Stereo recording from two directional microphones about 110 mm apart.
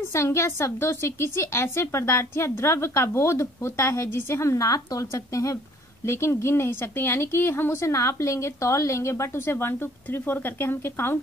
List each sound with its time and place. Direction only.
0.0 s a woman's voice: 25° left (ahead or behind)